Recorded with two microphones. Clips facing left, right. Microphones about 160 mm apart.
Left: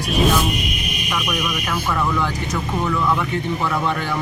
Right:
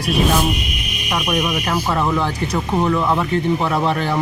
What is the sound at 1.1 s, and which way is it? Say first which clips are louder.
Speech: right 5 dB; 30° right (ahead or behind).